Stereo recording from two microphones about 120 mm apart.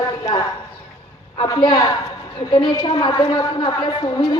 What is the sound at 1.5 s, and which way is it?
A woman's voice, 35° left (ahead or behind).